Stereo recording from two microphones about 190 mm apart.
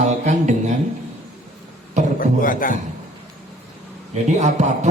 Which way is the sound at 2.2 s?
45° left (ahead or behind).